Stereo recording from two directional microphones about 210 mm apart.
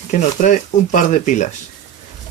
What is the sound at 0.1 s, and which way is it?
Speech, 35° left (ahead or behind).